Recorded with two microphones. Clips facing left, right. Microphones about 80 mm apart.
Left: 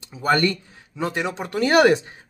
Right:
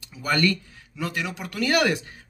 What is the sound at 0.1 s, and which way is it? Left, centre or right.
Speech, left.